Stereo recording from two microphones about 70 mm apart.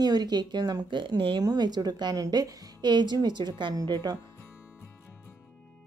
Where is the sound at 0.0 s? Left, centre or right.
Right.